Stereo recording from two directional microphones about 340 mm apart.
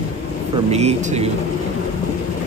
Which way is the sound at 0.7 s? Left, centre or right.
Centre.